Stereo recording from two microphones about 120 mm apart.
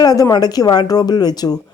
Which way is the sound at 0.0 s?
30° left (ahead or behind).